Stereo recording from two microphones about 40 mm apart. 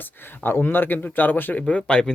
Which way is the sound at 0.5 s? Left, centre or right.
Left.